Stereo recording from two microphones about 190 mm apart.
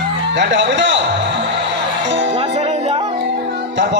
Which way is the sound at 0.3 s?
70° right (ahead or behind).